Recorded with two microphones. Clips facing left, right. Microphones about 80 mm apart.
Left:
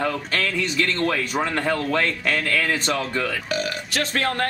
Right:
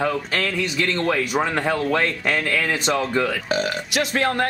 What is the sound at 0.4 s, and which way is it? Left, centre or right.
Speech, centre.